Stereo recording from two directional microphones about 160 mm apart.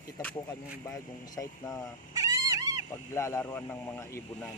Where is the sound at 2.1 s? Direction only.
20° right (ahead or behind).